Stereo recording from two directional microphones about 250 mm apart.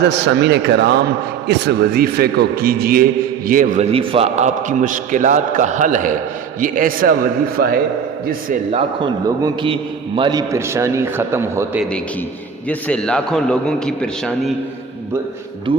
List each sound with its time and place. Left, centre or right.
0.3 s a man's voice: right
9.4 s a man's voice: centre
12.6 s a man's voice: centre
15.7 s a man's voice: centre